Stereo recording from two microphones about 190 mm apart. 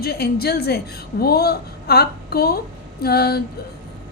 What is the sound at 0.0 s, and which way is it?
A woman's voice, 55° left (ahead or behind).